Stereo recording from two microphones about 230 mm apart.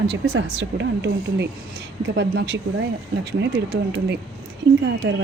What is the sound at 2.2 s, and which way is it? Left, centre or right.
A woman's voice, right.